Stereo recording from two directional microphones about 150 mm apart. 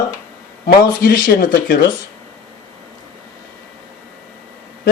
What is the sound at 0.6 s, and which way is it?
Speech, 80° left.